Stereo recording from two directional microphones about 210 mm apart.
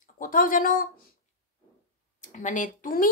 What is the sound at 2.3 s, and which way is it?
Speech, 35° left (ahead or behind).